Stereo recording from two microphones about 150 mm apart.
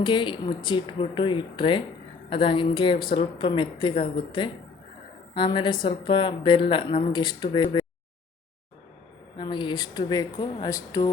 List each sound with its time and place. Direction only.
0.0 s a woman's voice: 30° left (ahead or behind)
9.4 s speech: 30° left (ahead or behind)